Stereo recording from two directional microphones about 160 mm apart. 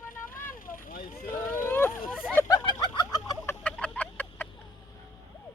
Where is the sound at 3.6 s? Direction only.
10° left (ahead or behind).